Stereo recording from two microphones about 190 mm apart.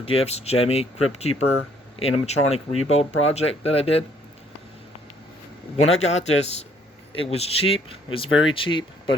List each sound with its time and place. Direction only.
0.0 s speech: 30° left (ahead or behind)
5.7 s speech: 35° left (ahead or behind)